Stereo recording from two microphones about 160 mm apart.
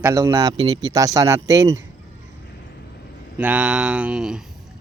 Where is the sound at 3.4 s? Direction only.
10° right (ahead or behind).